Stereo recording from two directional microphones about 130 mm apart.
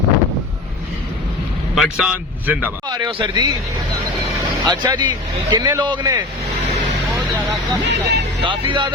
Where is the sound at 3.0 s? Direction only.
35° right (ahead or behind).